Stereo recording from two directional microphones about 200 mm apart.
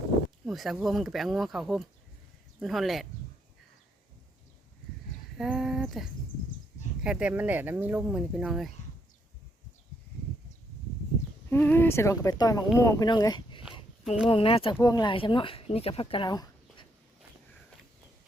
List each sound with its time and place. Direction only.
0.4 s speech: centre (ahead or behind)
5.4 s speech: centre (ahead or behind)
11.4 s speech: 10° left (ahead or behind)